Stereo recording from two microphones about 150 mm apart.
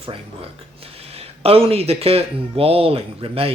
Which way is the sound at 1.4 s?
40° right (ahead or behind).